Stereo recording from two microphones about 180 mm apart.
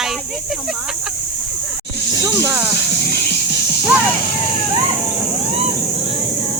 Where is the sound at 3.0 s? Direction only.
60° left (ahead or behind).